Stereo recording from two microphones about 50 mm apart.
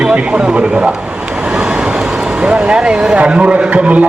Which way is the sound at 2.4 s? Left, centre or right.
Centre.